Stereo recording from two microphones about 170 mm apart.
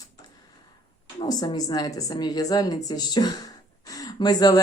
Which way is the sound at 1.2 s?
25° left (ahead or behind).